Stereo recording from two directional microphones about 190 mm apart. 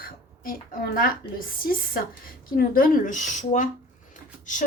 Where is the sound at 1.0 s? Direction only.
50° left (ahead or behind).